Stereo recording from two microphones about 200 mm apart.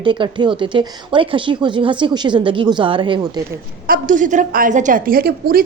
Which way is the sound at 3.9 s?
40° right (ahead or behind).